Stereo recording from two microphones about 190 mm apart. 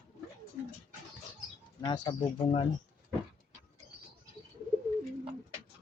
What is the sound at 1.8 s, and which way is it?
Speech, 25° left (ahead or behind).